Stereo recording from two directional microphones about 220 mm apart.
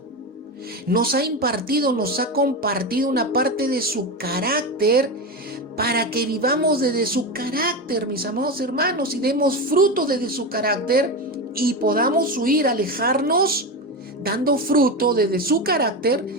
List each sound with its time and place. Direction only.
0.9 s a woman's voice: 45° right (ahead or behind)